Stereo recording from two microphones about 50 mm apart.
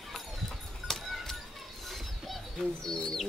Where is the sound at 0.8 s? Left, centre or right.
Centre.